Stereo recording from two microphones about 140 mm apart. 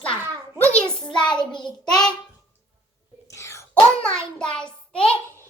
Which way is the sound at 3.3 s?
20° left (ahead or behind).